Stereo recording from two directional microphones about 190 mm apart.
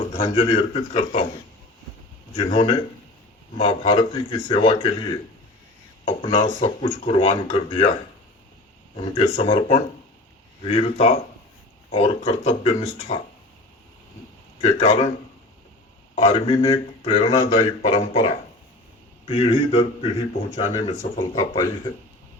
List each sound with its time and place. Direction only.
0.2 s speech: 30° left (ahead or behind)
2.5 s a man's voice: 30° left (ahead or behind)
9.3 s speech: 30° left (ahead or behind)
14.6 s speech: 35° left (ahead or behind)
16.1 s speech: 30° left (ahead or behind)
19.2 s a man's voice: 30° left (ahead or behind)